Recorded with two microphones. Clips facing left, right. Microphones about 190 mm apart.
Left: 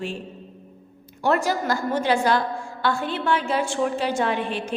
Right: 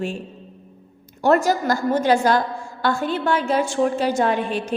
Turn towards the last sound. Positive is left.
turn(degrees=-45)  # may be behind; listen again after turning